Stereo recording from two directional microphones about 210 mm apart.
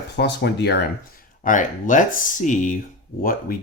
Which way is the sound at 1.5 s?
35° left (ahead or behind).